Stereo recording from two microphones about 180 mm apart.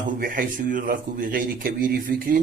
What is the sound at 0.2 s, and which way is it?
A man's voice, 50° right (ahead or behind).